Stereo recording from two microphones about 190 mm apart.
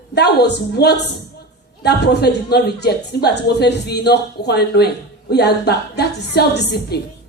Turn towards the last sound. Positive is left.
turn(degrees=60)  # may be behind; listen again after turning